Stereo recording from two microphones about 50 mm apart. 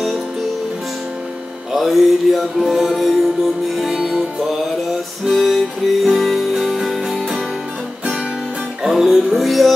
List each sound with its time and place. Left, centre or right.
1.8 s music: centre
5.3 s music: centre
8.8 s music: centre